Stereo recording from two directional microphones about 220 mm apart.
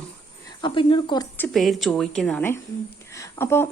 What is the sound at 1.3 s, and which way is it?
A woman's voice, 5° left (ahead or behind).